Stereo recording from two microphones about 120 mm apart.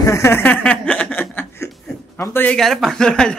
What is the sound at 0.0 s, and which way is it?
Chuckle, 25° left (ahead or behind).